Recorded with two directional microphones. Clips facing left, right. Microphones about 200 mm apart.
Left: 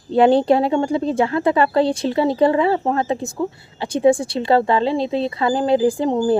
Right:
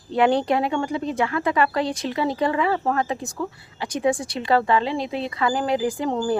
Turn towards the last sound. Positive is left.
turn(degrees=25)  # may be behind; listen again after turning